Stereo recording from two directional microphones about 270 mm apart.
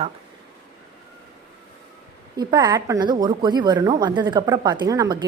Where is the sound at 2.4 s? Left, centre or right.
Centre.